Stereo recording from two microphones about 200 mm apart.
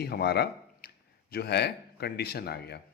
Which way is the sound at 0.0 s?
55° left (ahead or behind).